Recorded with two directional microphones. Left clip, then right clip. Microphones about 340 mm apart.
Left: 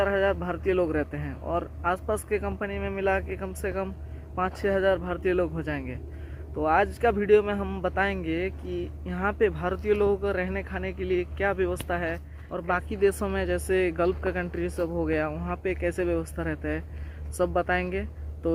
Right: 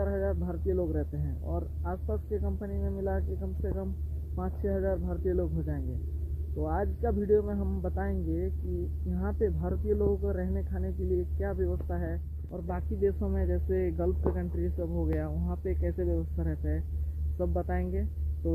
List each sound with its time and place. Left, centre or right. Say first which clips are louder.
0.0 s a man's voice: left 8 dB; centre